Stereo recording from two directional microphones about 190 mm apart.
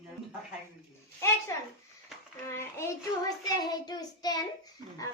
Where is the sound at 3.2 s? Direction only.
20° left (ahead or behind).